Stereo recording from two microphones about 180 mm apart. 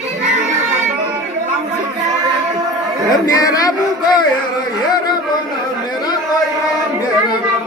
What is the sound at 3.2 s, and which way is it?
Speech, 20° left (ahead or behind).